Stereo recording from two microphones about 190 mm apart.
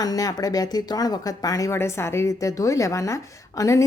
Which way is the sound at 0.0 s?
20° left (ahead or behind).